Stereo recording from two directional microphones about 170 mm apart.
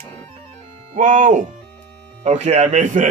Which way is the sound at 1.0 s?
50° right (ahead or behind).